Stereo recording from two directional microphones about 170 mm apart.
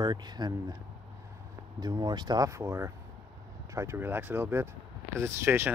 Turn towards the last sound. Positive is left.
turn(degrees=-15)  # may be behind; listen again after turning